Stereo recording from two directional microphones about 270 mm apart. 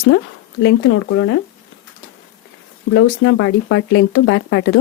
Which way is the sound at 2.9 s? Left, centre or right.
Left.